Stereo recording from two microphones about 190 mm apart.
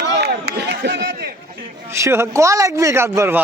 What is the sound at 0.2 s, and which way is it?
Run, 60° right (ahead or behind).